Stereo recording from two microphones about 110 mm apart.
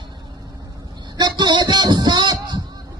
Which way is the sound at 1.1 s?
40° right (ahead or behind).